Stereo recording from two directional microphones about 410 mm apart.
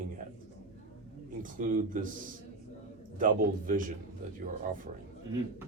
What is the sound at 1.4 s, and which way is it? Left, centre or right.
Speech, centre.